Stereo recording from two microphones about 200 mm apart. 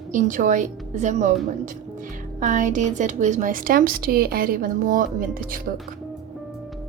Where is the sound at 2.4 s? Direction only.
40° right (ahead or behind).